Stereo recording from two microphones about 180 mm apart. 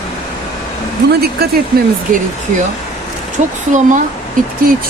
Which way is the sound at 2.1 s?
50° right (ahead or behind).